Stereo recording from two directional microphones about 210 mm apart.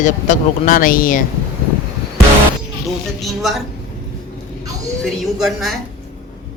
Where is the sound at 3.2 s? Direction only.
Centre (ahead or behind).